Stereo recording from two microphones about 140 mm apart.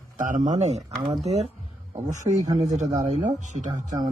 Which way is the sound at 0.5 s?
55° right (ahead or behind).